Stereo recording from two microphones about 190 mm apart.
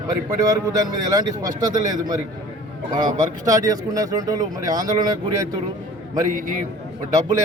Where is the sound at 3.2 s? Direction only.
20° right (ahead or behind).